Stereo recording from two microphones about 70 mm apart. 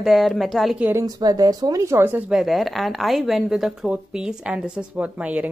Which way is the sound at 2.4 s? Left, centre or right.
Centre.